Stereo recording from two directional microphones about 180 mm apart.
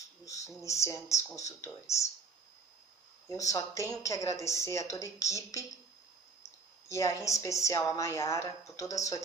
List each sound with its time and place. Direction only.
0.2 s a sound: 15° left (ahead or behind)
0.8 s a woman's voice: 15° left (ahead or behind)
3.3 s a woman's voice: 20° left (ahead or behind)
6.9 s a woman's voice: 15° left (ahead or behind)